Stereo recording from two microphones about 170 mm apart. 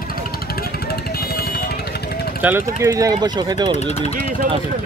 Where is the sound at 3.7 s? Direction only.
40° left (ahead or behind).